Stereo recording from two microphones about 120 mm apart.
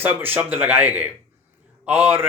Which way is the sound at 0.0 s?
15° right (ahead or behind).